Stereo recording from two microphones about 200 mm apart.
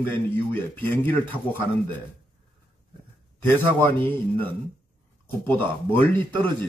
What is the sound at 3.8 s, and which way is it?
Speech, 10° left (ahead or behind).